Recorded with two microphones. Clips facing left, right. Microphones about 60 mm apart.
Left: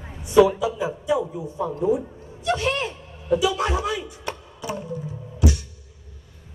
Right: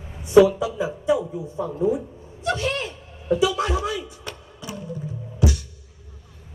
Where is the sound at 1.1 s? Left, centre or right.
Left.